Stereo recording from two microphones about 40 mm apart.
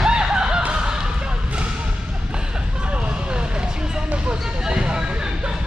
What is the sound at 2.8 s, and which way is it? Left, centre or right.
Vehicle, right.